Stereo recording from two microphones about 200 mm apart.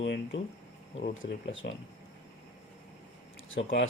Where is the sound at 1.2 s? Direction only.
70° left (ahead or behind).